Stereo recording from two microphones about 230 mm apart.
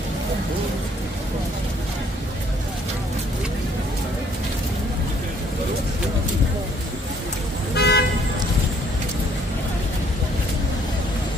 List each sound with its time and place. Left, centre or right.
7.7 s vehicle: left